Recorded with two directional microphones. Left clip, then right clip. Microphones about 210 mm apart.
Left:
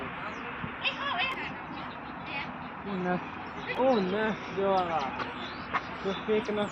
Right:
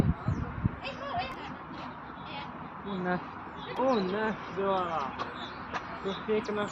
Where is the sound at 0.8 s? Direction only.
55° right (ahead or behind).